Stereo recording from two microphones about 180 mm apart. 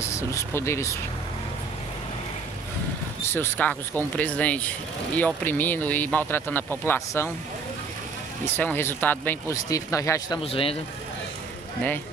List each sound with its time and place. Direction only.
0.1 s speech: 15° left (ahead or behind)
3.3 s speech: 10° left (ahead or behind)
8.5 s speech: 10° left (ahead or behind)
10.4 s speech: 30° left (ahead or behind)